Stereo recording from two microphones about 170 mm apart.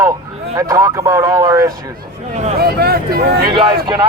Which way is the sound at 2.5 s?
65° right (ahead or behind).